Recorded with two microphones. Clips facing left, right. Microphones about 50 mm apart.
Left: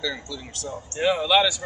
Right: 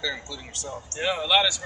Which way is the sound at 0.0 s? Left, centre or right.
Centre.